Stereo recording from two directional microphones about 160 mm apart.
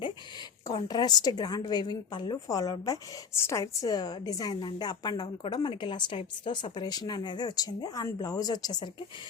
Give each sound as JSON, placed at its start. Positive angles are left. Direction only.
{"t": 0.7, "sound": "a woman's voice", "side_deg": 25}